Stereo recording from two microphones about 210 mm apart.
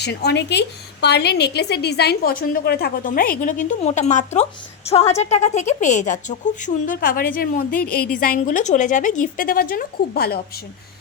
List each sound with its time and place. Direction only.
0.0 s a woman's voice: 50° left (ahead or behind)